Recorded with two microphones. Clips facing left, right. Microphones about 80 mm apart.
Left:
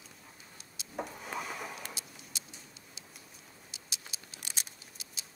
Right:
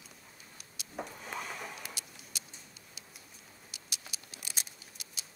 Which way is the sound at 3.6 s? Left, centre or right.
Right.